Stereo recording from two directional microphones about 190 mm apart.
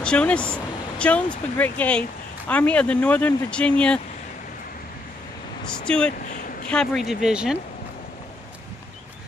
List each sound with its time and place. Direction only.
0.0 s speech: 5° left (ahead or behind)
5.6 s speech: 5° left (ahead or behind)
6.2 s a sound: 40° left (ahead or behind)
6.7 s speech: 5° left (ahead or behind)